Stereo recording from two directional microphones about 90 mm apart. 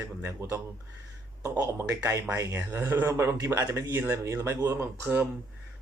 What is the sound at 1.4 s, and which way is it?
Speech, 40° right (ahead or behind).